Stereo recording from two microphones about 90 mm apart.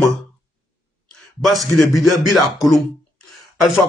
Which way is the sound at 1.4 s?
Centre (ahead or behind).